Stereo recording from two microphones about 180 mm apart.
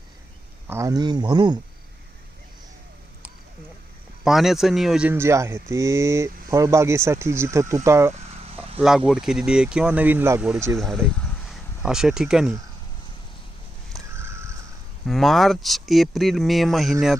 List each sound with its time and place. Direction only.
0.7 s speech: 15° right (ahead or behind)
4.2 s speech: centre (ahead or behind)
8.1 s vehicle: 35° right (ahead or behind)
8.8 s speech: 5° right (ahead or behind)
10.8 s speech: centre (ahead or behind)
14.1 s crow: 15° right (ahead or behind)
15.0 s speech: centre (ahead or behind)